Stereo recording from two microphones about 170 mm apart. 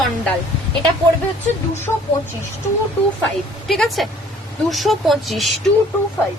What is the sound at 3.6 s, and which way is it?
A woman's voice, centre (ahead or behind).